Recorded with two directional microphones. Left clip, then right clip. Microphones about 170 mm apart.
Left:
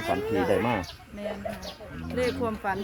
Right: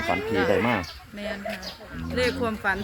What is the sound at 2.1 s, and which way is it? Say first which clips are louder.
Speech: right 3 dB; 20° left (ahead or behind).